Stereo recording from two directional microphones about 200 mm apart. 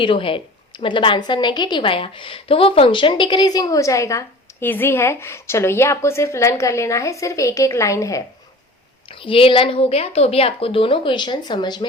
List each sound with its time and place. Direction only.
0.0 s a woman's voice: 25° left (ahead or behind)